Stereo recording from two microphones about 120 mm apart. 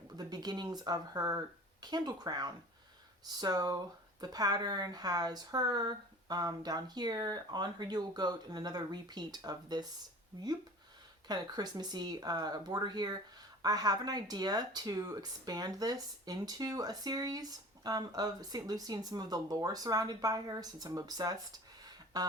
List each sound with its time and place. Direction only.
0.2 s speech: 35° right (ahead or behind)
11.3 s speech: 35° right (ahead or behind)